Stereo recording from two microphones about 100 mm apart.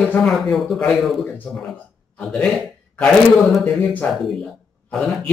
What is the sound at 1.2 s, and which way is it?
Speech, 20° left (ahead or behind).